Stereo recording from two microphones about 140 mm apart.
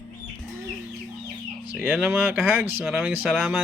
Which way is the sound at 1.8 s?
15° right (ahead or behind).